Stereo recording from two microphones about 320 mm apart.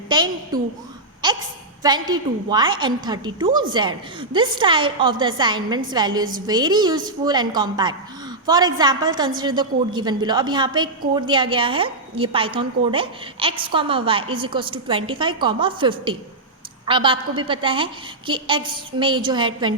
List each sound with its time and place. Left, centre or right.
0.1 s a woman's voice: centre
1.2 s a sound: centre
1.8 s a woman's voice: centre